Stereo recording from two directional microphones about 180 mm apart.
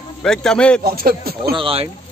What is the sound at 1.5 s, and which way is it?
Speech, 30° right (ahead or behind).